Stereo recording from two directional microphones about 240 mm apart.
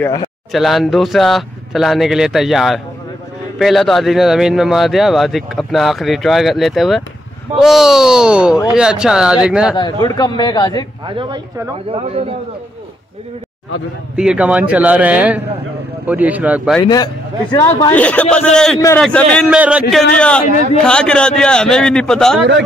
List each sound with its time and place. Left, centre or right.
0.0 s a man's voice: centre
0.5 s a man's voice: centre
10.0 s a man's voice: centre
11.1 s a man's voice: centre
14.1 s a man's voice: centre
16.8 s a man's voice: centre